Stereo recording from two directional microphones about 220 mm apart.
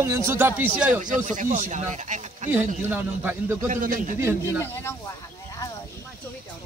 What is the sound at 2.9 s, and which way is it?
Speech, 10° right (ahead or behind).